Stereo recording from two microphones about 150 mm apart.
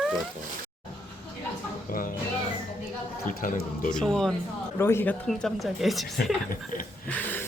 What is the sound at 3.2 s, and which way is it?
Speech, 75° left (ahead or behind).